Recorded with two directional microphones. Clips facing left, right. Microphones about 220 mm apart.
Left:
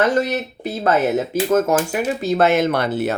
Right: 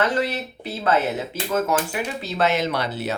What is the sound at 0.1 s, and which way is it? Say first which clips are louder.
Speech: left 5 dB; 45° left (ahead or behind).